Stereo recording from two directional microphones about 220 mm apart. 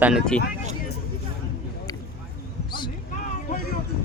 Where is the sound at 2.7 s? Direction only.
20° left (ahead or behind).